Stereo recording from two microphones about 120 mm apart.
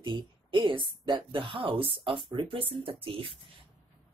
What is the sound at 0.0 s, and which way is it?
A woman's voice, 40° right (ahead or behind).